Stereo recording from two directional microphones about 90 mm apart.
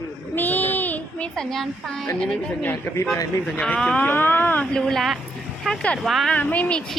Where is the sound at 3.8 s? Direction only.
10° left (ahead or behind).